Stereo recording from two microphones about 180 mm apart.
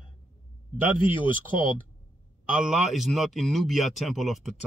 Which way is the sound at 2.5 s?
5° right (ahead or behind).